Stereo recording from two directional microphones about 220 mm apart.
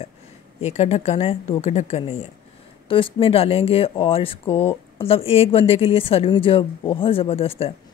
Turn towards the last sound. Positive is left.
turn(degrees=25)  # may be behind; listen again after turning